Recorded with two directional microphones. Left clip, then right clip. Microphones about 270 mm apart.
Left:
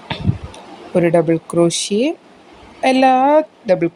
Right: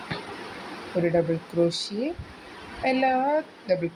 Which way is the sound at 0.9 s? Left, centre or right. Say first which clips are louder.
Left 10 dB; left.